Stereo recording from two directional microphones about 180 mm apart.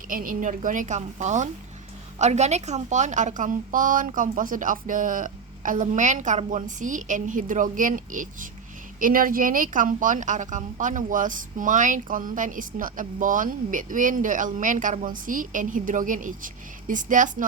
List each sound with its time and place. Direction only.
0.1 s a woman's voice: 50° right (ahead or behind)